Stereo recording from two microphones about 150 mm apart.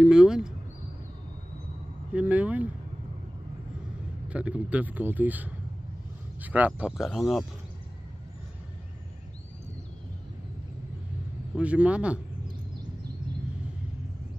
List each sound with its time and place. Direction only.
0.0 s speech: 5° right (ahead or behind)
2.1 s a man's voice: 10° right (ahead or behind)
4.3 s a man's voice: 10° right (ahead or behind)
11.5 s a man's voice: 10° right (ahead or behind)